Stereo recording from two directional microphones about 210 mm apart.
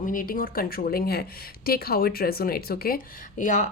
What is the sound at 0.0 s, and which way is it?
Speech, 40° left (ahead or behind).